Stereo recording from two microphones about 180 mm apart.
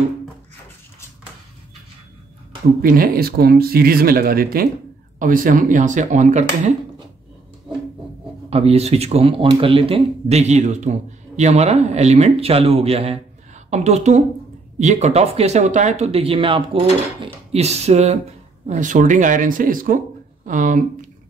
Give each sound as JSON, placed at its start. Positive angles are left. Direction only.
{"t": 2.8, "sound": "speech", "side_deg": -55}
{"t": 8.5, "sound": "speech", "side_deg": -35}